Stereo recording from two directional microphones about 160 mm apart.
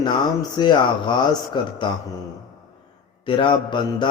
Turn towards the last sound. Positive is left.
turn(degrees=30)  # may be behind; listen again after turning